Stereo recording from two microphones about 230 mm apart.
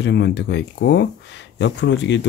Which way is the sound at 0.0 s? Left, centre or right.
Left.